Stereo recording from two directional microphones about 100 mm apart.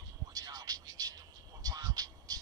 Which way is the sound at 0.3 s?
40° right (ahead or behind).